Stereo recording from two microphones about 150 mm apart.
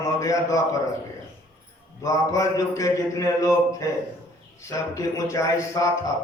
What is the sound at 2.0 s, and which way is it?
Speech, 20° left (ahead or behind).